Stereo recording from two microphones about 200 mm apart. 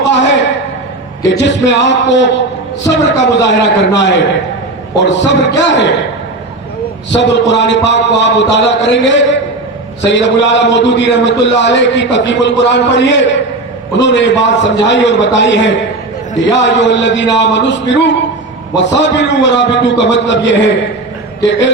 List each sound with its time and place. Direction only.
0.0 s a sound: 60° left (ahead or behind)
1.3 s a man's voice: 60° left (ahead or behind)
7.1 s a man's voice: 60° left (ahead or behind)